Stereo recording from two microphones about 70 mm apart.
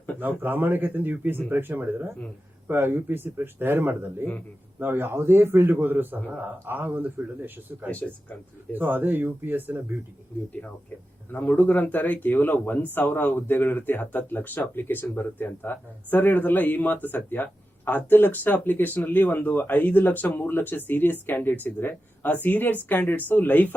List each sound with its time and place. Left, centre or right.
0.2 s speech: right
7.9 s speech: left
8.7 s speech: right
11.3 s speech: left